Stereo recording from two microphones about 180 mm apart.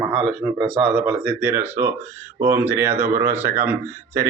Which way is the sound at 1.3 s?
10° right (ahead or behind).